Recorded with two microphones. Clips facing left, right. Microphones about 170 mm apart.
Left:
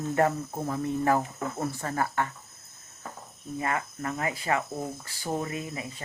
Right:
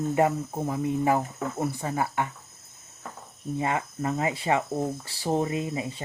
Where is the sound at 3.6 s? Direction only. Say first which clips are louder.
Right 3 dB; 25° right (ahead or behind).